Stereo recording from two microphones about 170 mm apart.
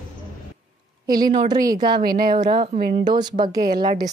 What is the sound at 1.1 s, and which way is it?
A woman's voice, 25° right (ahead or behind).